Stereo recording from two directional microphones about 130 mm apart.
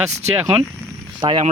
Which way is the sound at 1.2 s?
35° right (ahead or behind).